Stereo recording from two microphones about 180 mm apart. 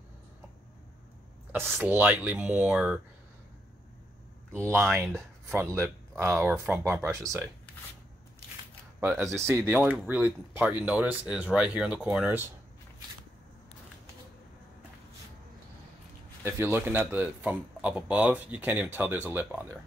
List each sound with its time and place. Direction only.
1.5 s speech: 10° right (ahead or behind)
4.5 s speech: 15° right (ahead or behind)
9.0 s speech: 15° right (ahead or behind)
16.4 s speech: 15° right (ahead or behind)